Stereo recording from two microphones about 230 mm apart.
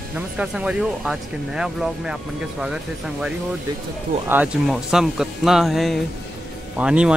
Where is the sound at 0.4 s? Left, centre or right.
Centre.